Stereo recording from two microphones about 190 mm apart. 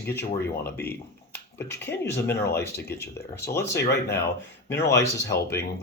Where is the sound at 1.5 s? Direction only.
10° left (ahead or behind).